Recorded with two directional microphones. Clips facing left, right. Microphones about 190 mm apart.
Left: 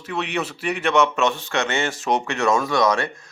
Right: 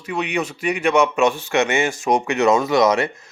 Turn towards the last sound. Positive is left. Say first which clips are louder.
# right 4 dB
turn(degrees=-20)  # may be behind; listen again after turning